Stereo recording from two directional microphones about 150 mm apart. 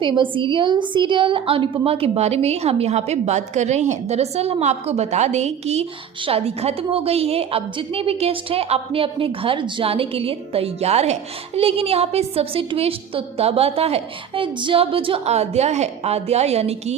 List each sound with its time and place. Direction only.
0.0 s a woman's voice: 35° right (ahead or behind)